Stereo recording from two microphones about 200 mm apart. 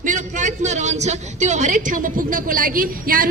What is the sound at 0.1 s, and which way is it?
A man's voice, 40° right (ahead or behind).